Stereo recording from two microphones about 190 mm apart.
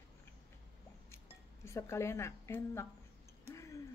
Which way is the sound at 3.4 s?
15° left (ahead or behind).